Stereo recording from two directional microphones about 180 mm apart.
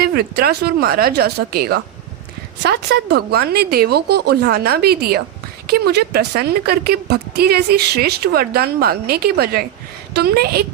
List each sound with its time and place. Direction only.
0.0 s a woman's voice: 60° right (ahead or behind)